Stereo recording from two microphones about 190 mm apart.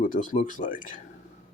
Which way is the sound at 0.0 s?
45° left (ahead or behind).